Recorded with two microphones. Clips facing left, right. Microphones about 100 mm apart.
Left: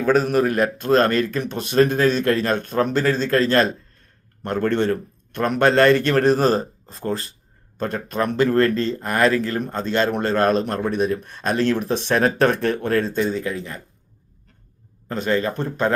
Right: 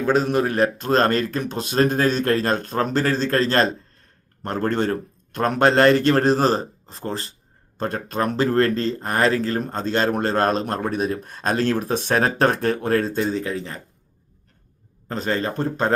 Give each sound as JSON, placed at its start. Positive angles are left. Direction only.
{"t": 0.1, "sound": "speech", "side_deg": -25}
{"t": 15.1, "sound": "speech", "side_deg": -35}